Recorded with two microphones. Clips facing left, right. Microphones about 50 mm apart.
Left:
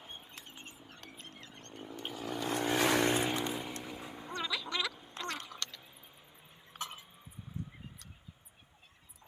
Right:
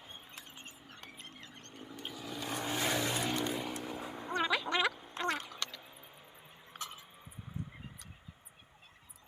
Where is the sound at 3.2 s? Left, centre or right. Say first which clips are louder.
Left 1 dB; centre.